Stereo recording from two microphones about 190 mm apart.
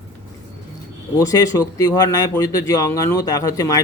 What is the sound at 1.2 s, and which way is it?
Speech, 15° left (ahead or behind).